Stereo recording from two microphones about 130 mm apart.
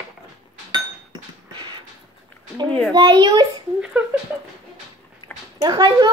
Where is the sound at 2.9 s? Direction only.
35° right (ahead or behind).